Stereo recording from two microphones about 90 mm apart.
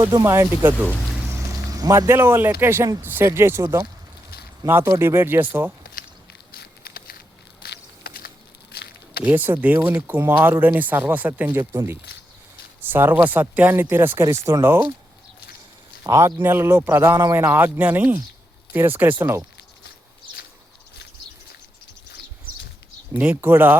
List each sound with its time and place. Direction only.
0.1 s speech: 35° right (ahead or behind)
1.7 s speech: 40° right (ahead or behind)
3.6 s speech: 40° right (ahead or behind); by 5.7 s 20° right (ahead or behind)
9.2 s speech: 20° right (ahead or behind)
16.0 s speech: 35° right (ahead or behind)
23.1 s speech: 20° right (ahead or behind)